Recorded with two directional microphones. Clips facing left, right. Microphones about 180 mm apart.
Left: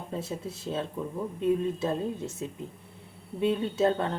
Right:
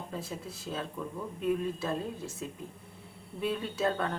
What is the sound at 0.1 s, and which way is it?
Speech, 25° left (ahead or behind).